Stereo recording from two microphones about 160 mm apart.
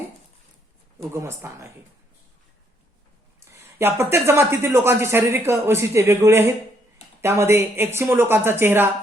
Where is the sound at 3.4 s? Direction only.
15° right (ahead or behind).